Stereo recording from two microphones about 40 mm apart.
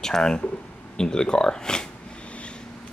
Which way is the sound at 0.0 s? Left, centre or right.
Centre.